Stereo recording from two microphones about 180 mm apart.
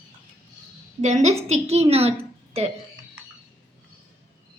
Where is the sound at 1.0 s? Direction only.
40° right (ahead or behind).